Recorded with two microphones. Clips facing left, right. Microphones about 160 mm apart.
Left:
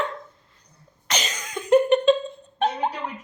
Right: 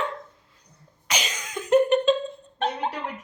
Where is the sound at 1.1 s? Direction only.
10° right (ahead or behind).